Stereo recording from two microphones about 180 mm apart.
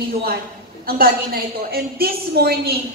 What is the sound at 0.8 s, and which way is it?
A woman's voice, 55° right (ahead or behind).